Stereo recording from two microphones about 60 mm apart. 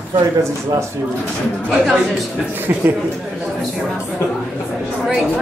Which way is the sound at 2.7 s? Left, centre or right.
Right.